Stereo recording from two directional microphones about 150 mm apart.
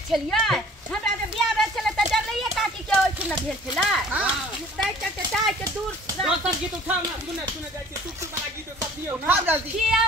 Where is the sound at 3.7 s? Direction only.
5° right (ahead or behind).